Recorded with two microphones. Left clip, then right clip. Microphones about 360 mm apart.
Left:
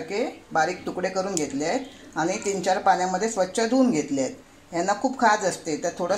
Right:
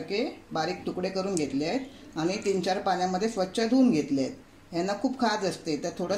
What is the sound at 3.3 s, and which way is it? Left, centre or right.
Speech, left.